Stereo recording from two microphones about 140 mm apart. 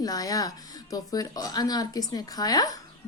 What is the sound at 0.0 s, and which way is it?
Speech, 25° left (ahead or behind).